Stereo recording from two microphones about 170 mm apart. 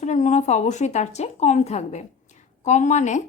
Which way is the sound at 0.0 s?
45° left (ahead or behind).